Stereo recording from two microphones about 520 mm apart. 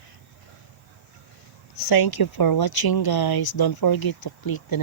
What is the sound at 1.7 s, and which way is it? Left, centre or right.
Speech, left.